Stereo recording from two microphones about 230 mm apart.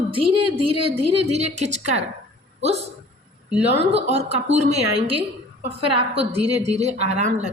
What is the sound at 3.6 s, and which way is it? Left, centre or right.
A woman's voice, right.